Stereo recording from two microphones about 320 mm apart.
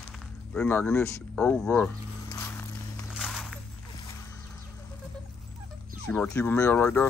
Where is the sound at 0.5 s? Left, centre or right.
Centre.